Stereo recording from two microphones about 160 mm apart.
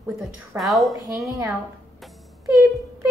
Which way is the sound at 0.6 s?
Centre (ahead or behind).